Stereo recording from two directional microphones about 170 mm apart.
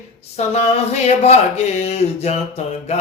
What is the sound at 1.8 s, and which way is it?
Speech, 40° left (ahead or behind).